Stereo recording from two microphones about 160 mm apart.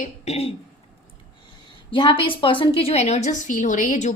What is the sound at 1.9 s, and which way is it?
A woman's voice, 30° left (ahead or behind).